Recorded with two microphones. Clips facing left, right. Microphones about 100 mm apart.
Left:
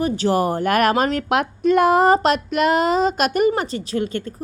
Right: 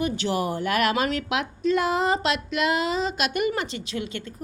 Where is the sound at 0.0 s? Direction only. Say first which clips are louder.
Left 6 dB; 40° left (ahead or behind).